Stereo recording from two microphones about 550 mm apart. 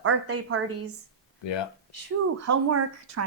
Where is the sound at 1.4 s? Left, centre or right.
Left.